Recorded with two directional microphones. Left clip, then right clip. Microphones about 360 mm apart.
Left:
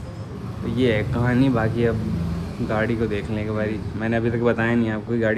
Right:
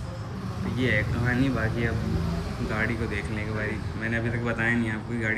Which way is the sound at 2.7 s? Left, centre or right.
Centre.